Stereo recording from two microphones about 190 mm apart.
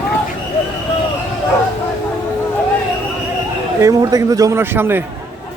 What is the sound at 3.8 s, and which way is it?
A man's voice, 20° right (ahead or behind).